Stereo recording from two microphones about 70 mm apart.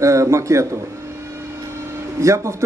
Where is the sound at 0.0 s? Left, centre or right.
Right.